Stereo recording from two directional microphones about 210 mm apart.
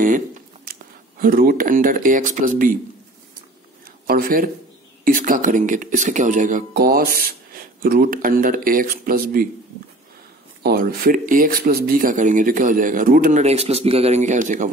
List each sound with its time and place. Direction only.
1.2 s speech: 45° right (ahead or behind)
4.1 s speech: 45° right (ahead or behind)
10.6 s speech: 45° right (ahead or behind)